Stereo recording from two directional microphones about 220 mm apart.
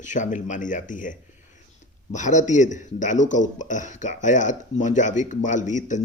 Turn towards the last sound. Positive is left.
turn(degrees=35)  # may be behind; listen again after turning